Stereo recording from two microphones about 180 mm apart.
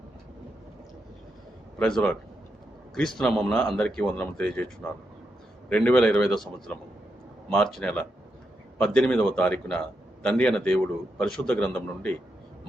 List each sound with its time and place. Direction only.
1.8 s speech: 5° left (ahead or behind)
5.6 s a man's voice: 5° left (ahead or behind)